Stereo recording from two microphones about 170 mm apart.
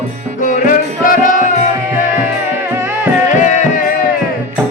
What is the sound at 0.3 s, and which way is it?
Music, 50° left (ahead or behind).